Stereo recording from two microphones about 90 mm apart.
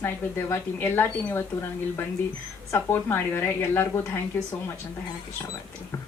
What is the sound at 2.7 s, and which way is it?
Speech, 25° left (ahead or behind).